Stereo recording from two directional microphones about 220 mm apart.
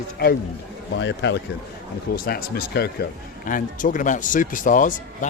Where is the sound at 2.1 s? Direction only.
45° left (ahead or behind).